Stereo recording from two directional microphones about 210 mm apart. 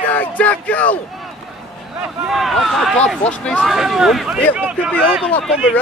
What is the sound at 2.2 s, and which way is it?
Speech, centre (ahead or behind).